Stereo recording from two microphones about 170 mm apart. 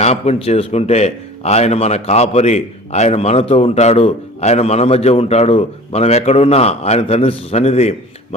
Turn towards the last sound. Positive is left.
turn(degrees=40)  # may be behind; listen again after turning